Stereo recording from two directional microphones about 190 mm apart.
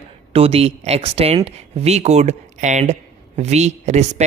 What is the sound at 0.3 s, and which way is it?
A man's voice, 30° right (ahead or behind).